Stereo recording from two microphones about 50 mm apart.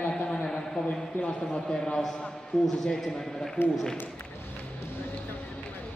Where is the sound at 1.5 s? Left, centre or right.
Centre.